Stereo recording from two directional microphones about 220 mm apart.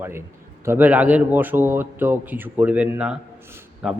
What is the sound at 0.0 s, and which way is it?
A man's voice, 10° right (ahead or behind).